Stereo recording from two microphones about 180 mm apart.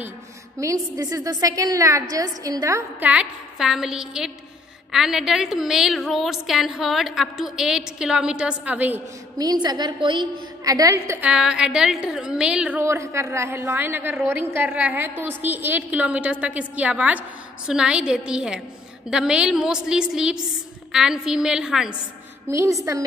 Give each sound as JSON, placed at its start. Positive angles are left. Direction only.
{"t": 0.6, "sound": "a woman's voice", "side_deg": -15}
{"t": 9.4, "sound": "a woman's voice", "side_deg": -20}
{"t": 22.5, "sound": "a woman's voice", "side_deg": -15}